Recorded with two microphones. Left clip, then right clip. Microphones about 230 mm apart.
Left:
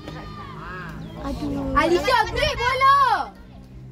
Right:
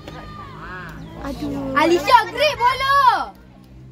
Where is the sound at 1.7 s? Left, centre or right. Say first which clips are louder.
Right 4 dB; right.